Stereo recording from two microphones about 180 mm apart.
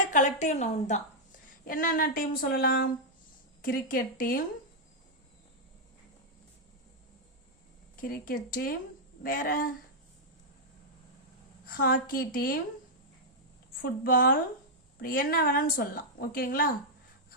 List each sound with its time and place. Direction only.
0.1 s a woman's voice: 45° left (ahead or behind)
1.6 s a woman's voice: 50° left (ahead or behind)
8.0 s a woman's voice: 50° left (ahead or behind)
11.6 s a woman's voice: 55° left (ahead or behind)
13.8 s a woman's voice: 55° left (ahead or behind)